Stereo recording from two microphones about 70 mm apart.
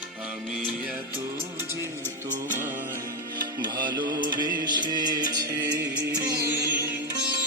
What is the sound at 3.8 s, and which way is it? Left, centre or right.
Music, right.